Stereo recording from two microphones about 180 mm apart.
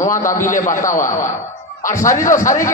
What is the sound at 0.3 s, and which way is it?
Speech, 45° left (ahead or behind).